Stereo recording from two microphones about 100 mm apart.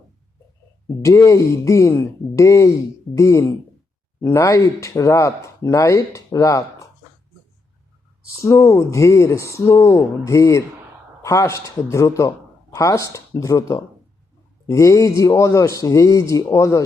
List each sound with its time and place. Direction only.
1.0 s speech: 30° left (ahead or behind)
8.4 s speech: 30° left (ahead or behind)